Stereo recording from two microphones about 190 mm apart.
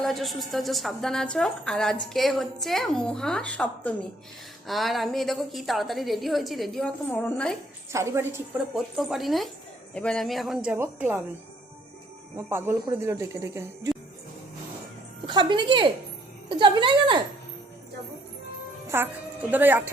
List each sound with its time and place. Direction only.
0.0 s a woman's voice: centre (ahead or behind)
7.9 s speech: 15° right (ahead or behind)
8.7 s a woman's voice: centre (ahead or behind)
12.5 s speech: 10° right (ahead or behind)
15.3 s speech: 25° right (ahead or behind)
18.9 s a woman's voice: 10° right (ahead or behind)